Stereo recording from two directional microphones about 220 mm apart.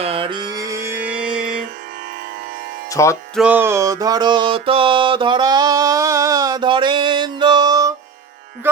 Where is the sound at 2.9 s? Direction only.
15° left (ahead or behind).